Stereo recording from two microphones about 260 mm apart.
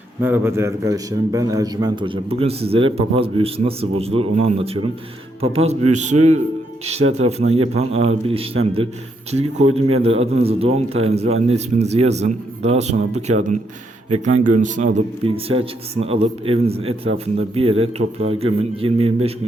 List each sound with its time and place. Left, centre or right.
0.2 s a man's voice: centre